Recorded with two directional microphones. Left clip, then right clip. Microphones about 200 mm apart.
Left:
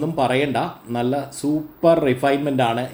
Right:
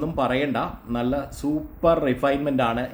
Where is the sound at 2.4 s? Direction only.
5° right (ahead or behind).